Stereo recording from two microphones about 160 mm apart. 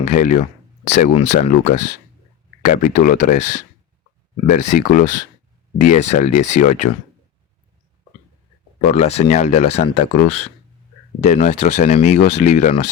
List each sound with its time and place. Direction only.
0.0 s speech: 50° left (ahead or behind)
4.4 s speech: 50° left (ahead or behind)
8.8 s speech: 45° left (ahead or behind)